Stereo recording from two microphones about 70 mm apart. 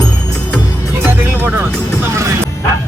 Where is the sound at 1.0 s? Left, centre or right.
Right.